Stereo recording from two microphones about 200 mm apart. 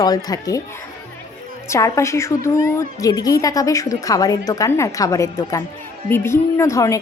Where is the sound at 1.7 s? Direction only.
15° left (ahead or behind).